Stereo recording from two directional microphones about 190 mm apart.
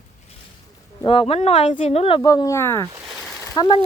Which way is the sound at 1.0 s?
30° left (ahead or behind).